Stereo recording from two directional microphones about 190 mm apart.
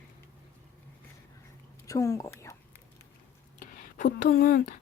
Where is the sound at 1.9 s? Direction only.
15° left (ahead or behind).